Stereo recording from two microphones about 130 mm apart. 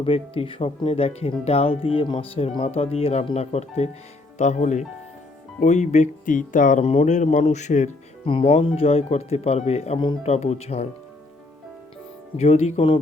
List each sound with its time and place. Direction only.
0.0 s speech: 45° left (ahead or behind); by 6.8 s 80° left
6.8 s speech: 60° left (ahead or behind)
8.2 s speech: 45° left (ahead or behind)
12.4 s speech: 55° left (ahead or behind)